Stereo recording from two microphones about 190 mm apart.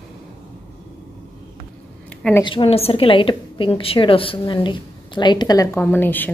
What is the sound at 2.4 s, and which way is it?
A woman's voice, 25° left (ahead or behind).